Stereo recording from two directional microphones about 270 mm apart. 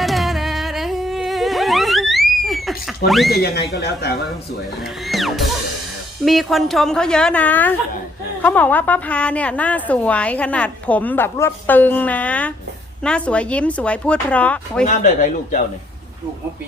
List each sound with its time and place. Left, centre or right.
0.0 s music: centre
3.1 s a woman's voice: centre
3.4 s speech: left
5.0 s a woman's voice: centre
14.8 s a man's voice: left